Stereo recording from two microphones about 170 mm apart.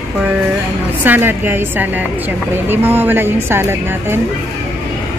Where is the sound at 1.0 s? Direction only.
10° right (ahead or behind).